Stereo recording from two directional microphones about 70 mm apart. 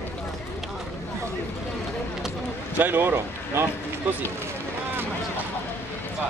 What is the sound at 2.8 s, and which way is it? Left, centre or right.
Speech, right.